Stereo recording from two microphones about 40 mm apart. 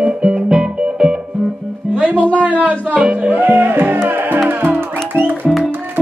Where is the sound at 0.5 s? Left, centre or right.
Centre.